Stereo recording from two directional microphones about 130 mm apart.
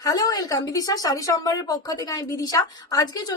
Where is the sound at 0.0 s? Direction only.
30° left (ahead or behind).